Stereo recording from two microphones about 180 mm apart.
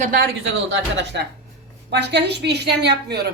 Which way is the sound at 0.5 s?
85° right.